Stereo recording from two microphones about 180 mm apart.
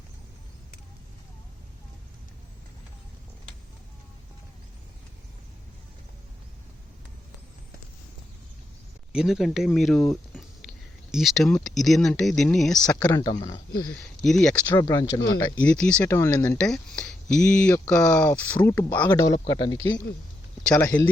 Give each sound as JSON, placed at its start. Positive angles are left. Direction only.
{"t": 9.1, "sound": "speech", "side_deg": 0}
{"t": 13.0, "sound": "speech", "side_deg": 20}
{"t": 14.2, "sound": "speech", "side_deg": 5}
{"t": 14.7, "sound": "speech", "side_deg": 20}
{"t": 15.6, "sound": "speech", "side_deg": 5}
{"t": 20.7, "sound": "speech", "side_deg": 10}